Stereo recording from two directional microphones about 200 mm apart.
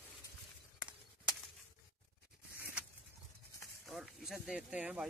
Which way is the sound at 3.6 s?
Centre (ahead or behind).